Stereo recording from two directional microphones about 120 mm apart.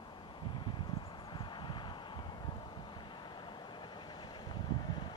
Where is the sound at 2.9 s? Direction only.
40° left (ahead or behind).